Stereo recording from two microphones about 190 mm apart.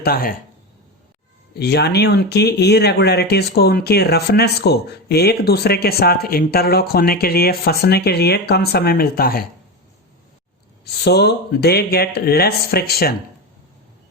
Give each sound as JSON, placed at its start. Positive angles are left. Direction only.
{"t": 0.0, "sound": "speech", "side_deg": 50}
{"t": 1.5, "sound": "speech", "side_deg": 60}
{"t": 11.0, "sound": "speech", "side_deg": 60}